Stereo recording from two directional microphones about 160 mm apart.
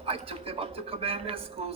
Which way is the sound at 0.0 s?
35° right (ahead or behind).